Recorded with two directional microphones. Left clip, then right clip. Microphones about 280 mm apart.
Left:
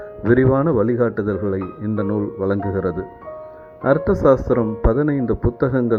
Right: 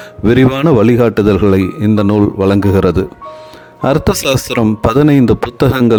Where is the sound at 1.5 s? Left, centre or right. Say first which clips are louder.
Right 12 dB; right.